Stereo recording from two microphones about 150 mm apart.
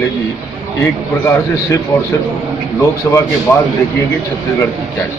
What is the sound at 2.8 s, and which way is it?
Speech, 20° left (ahead or behind).